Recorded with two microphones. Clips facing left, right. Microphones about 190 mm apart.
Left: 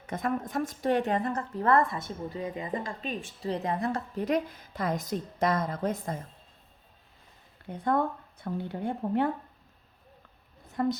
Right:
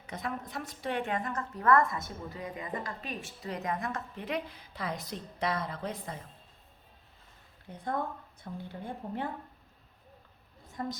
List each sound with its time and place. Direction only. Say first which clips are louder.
0.1 s a woman's voice: left 7 dB; 50° left (ahead or behind)
7.7 s speech: left 7 dB; 65° left (ahead or behind)
10.8 s speech: left 9 dB; 65° left (ahead or behind)